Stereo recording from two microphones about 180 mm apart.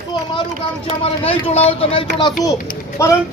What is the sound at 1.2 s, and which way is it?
A child's voice, 35° left (ahead or behind).